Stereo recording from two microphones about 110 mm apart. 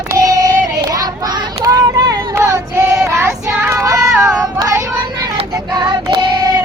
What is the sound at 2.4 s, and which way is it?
Child singing, 25° right (ahead or behind).